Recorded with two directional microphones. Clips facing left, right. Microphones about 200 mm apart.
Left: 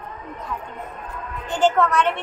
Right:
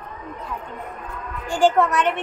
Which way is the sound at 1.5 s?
15° right (ahead or behind).